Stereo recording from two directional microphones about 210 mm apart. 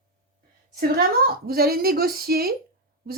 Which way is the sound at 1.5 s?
45° right (ahead or behind).